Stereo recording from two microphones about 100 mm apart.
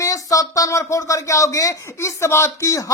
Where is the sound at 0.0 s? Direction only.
35° left (ahead or behind).